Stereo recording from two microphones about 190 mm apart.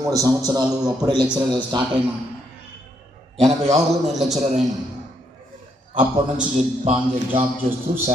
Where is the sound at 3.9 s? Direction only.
Centre (ahead or behind).